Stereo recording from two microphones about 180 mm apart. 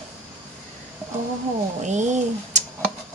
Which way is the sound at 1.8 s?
40° right (ahead or behind).